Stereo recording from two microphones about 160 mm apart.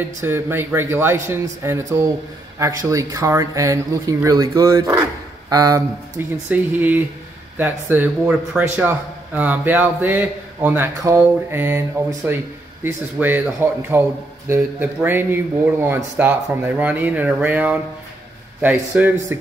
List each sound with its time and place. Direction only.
0.0 s a man's voice: 15° right (ahead or behind)
12.8 s a man's voice: 10° right (ahead or behind)